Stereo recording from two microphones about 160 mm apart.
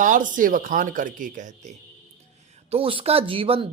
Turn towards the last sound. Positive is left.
turn(degrees=-35)  # may be behind; listen again after turning